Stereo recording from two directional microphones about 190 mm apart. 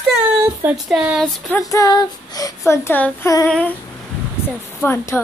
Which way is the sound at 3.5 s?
5° left (ahead or behind).